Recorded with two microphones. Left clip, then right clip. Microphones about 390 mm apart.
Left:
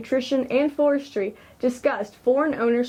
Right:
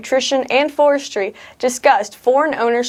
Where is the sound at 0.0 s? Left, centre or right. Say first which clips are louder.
Right 7 dB; right.